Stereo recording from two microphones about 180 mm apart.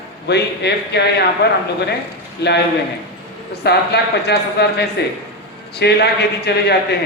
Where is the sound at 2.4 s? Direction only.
65° left (ahead or behind).